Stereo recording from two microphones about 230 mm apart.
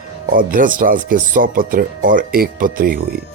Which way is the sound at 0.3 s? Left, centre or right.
Right.